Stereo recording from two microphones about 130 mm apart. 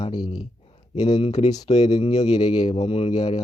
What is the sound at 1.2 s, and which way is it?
Speech, 60° left (ahead or behind).